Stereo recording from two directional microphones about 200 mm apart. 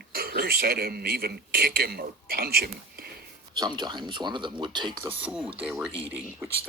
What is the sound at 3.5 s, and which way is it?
Speech, 20° right (ahead or behind).